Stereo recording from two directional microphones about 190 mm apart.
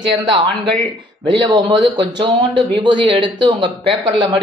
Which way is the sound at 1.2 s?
25° right (ahead or behind).